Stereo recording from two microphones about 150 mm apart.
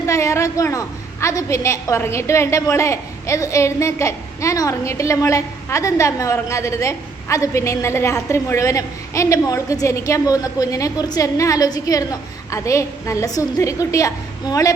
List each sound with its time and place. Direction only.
0.0 s a woman's voice: 20° left (ahead or behind)